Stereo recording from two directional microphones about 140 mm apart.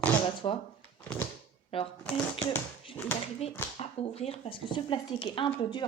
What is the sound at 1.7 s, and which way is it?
Speech, 40° left (ahead or behind).